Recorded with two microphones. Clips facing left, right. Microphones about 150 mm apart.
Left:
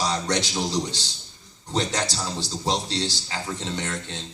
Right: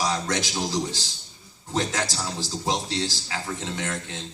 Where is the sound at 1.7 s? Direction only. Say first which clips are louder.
Left 1 dB; 25° left (ahead or behind).